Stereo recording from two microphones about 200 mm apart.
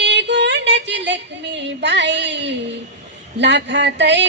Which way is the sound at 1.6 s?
60° right (ahead or behind).